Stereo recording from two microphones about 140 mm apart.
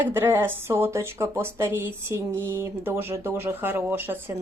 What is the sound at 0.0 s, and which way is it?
Speech, 15° right (ahead or behind).